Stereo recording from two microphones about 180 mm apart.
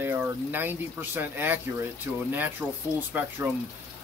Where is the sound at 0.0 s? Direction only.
10° right (ahead or behind).